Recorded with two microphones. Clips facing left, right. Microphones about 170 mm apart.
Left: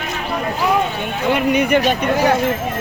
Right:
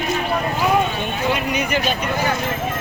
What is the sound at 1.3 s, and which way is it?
Speech, 55° left (ahead or behind).